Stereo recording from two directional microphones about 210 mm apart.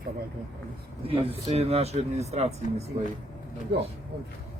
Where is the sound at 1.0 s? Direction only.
25° right (ahead or behind).